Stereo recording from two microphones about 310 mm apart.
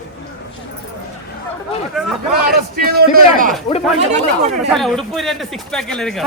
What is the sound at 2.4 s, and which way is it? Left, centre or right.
A man's voice, right.